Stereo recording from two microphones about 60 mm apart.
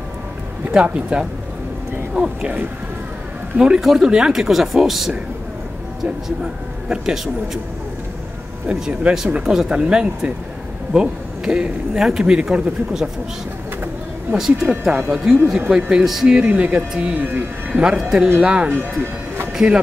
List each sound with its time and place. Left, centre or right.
0.7 s speech: centre
3.5 s speech: centre
6.2 s speech: centre
8.6 s speech: centre
14.3 s speech: centre
14.7 s speech: centre
16.4 s speech: right
17.8 s speech: centre
18.7 s music: right